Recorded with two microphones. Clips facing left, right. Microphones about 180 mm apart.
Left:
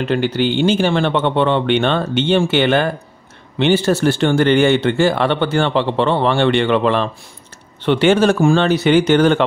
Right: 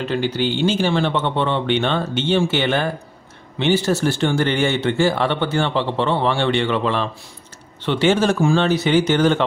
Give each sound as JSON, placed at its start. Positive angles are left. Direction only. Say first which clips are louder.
{"t": 0.0, "sound": "a man's voice", "louder": "left 4 dB", "side_deg": 65}